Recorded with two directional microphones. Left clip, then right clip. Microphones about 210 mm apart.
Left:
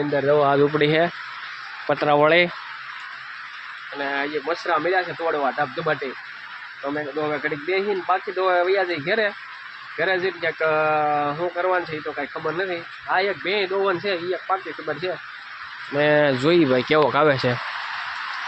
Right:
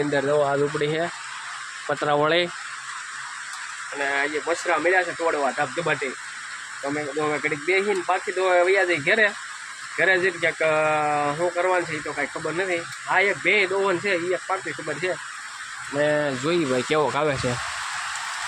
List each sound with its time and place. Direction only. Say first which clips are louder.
0.3 s speech: left 4 dB; 30° left (ahead or behind)
0.8 s speech: left 6 dB; 20° left (ahead or behind)
1.9 s speech: left 4 dB; 5° left (ahead or behind)
4.0 s speech: right 1 dB; centre (ahead or behind)
7.2 s speech: right 1 dB; centre (ahead or behind)
16.0 s speech: left 4 dB; 50° left (ahead or behind)
16.4 s speech: left 6 dB; 25° left (ahead or behind)
16.7 s speech: left 4 dB; 5° left (ahead or behind)